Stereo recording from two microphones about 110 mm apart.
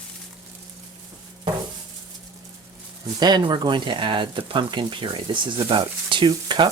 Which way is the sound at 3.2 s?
40° right (ahead or behind).